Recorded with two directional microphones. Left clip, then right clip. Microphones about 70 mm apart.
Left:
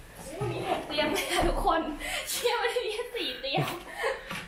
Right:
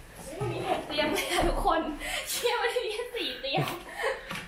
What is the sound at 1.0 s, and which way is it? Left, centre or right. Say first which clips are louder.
Chuckle: even; left.